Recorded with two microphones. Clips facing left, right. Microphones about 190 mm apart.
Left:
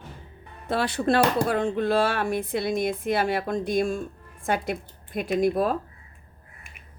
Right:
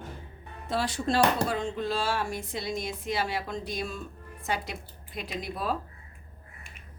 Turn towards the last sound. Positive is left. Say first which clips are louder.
# left 10 dB
turn(degrees=50)  # may be behind; listen again after turning